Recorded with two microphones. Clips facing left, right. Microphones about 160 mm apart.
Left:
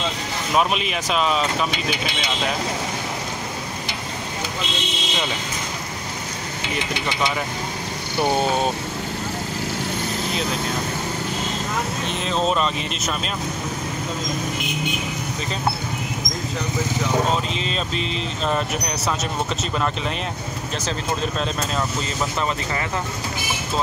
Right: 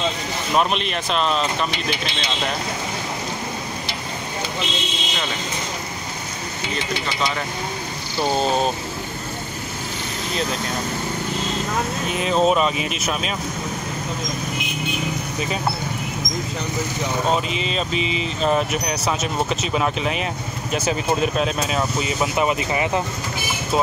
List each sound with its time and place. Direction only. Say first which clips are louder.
0.6 s speech: even; 5° left (ahead or behind)
6.7 s speech: left 1 dB; 15° left (ahead or behind)
12.1 s speech: right 5 dB; 5° right (ahead or behind)
17.5 s speech: right 2 dB; 5° right (ahead or behind)